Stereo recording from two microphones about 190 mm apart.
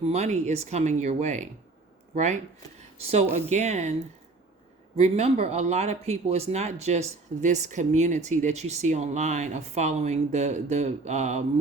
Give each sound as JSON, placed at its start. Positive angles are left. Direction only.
{"t": 0.0, "sound": "speech", "side_deg": -35}
{"t": 4.9, "sound": "speech", "side_deg": -35}